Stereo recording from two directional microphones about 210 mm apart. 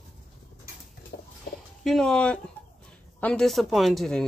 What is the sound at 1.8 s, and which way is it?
Speech, centre (ahead or behind).